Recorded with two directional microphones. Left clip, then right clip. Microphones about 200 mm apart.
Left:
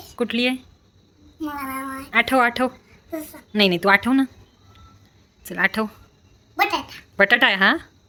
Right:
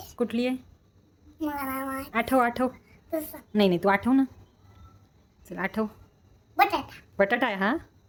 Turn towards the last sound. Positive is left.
turn(degrees=-5)  # may be behind; listen again after turning